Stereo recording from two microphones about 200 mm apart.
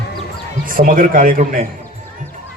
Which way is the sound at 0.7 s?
45° right (ahead or behind).